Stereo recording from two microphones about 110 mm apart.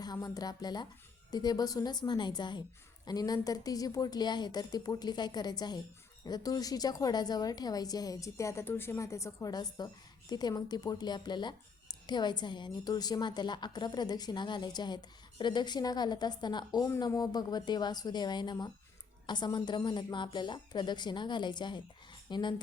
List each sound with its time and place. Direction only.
0.0 s a woman's voice: 35° left (ahead or behind)
9.5 s a woman's voice: 40° left (ahead or behind)